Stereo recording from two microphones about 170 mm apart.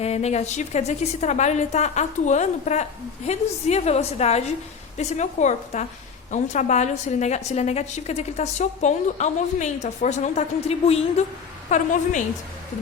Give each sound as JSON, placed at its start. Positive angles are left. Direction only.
{"t": 0.0, "sound": "a woman's voice", "side_deg": 40}
{"t": 11.7, "sound": "a woman's voice", "side_deg": 45}